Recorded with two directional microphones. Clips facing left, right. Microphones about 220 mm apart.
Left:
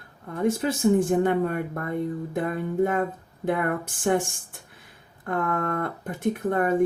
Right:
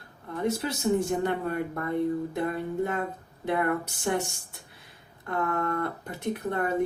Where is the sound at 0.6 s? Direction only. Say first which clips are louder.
Left 7 dB; 50° left (ahead or behind).